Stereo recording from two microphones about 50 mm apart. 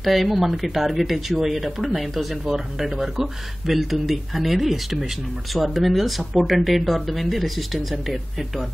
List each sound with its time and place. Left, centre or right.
0.0 s speech: centre